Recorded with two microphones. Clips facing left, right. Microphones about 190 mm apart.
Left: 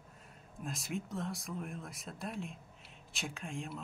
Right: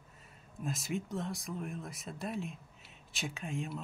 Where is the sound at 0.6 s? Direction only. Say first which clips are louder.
Right 3 dB; centre (ahead or behind).